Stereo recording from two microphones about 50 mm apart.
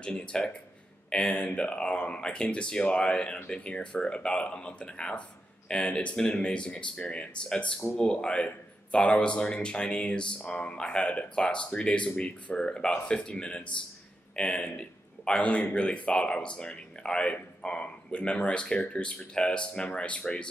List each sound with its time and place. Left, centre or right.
0.0 s a man's voice: centre